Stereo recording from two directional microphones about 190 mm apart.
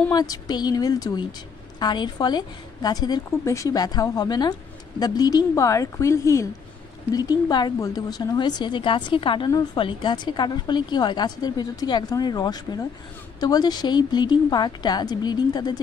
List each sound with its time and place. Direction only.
0.1 s a woman's voice: 20° left (ahead or behind)